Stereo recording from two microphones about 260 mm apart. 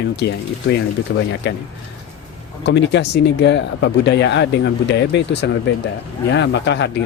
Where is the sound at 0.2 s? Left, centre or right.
Left.